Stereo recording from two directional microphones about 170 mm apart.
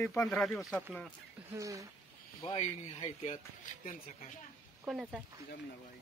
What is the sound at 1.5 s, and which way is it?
Speech, 20° right (ahead or behind).